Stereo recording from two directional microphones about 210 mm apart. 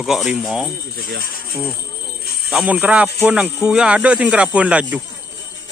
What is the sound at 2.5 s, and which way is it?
Speech, 5° right (ahead or behind).